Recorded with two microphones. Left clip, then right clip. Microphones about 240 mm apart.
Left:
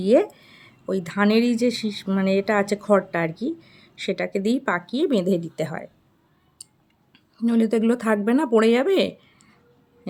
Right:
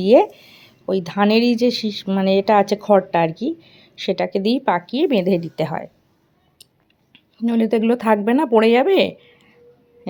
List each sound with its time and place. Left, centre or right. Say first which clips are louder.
0.0 s speech: right 5 dB; centre
1.8 s speech: right 4 dB; right
2.0 s speech: right 6 dB; centre
6.6 s a sound: left 1 dB; centre
7.1 s speech: right 2 dB; centre